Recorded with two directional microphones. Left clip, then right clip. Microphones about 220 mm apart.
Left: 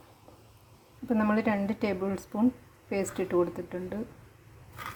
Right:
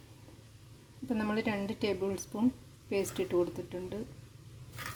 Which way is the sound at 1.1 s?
Centre (ahead or behind).